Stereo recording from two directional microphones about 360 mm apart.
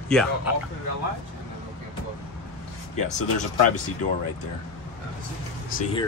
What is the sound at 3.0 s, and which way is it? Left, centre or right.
Speech, centre.